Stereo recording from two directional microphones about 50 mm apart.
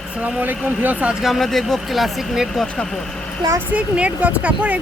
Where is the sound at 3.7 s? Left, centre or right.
Right.